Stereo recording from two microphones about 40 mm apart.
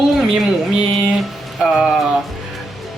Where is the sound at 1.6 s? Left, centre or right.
Centre.